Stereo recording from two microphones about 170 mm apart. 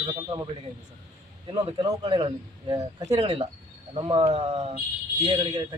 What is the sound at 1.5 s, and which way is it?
Speech, 30° right (ahead or behind).